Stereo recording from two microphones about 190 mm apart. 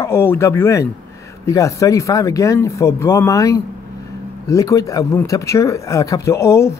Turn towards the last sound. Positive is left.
turn(degrees=15)  # may be behind; listen again after turning